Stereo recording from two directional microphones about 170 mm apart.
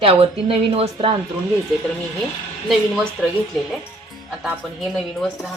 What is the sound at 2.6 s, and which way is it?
Speech, centre (ahead or behind).